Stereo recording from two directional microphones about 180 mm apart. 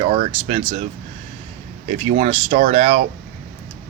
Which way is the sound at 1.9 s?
35° right (ahead or behind).